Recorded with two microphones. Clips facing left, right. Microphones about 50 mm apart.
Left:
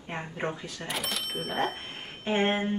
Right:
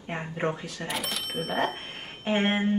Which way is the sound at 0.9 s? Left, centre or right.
Centre.